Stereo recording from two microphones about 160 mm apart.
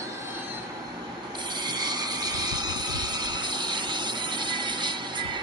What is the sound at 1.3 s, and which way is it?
Train, 30° right (ahead or behind).